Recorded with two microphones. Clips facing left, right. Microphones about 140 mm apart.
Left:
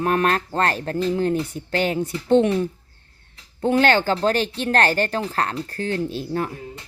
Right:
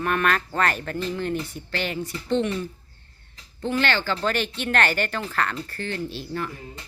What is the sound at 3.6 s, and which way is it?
Speech, 45° left (ahead or behind).